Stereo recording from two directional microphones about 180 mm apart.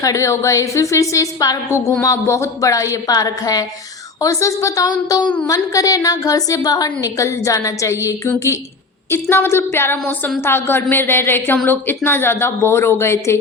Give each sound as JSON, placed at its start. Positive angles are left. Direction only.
{"t": 0.0, "sound": "a woman's voice", "side_deg": 20}